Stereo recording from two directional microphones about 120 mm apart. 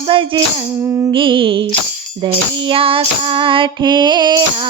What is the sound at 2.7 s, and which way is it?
Music, 50° right (ahead or behind).